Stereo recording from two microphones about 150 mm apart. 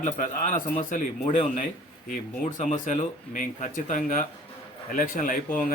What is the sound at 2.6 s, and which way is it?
A man's voice, 50° left (ahead or behind).